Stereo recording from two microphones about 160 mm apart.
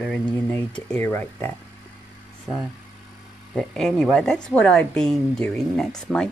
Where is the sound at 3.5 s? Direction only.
5° left (ahead or behind).